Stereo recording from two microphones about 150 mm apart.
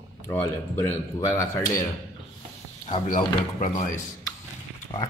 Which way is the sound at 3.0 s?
60° left (ahead or behind).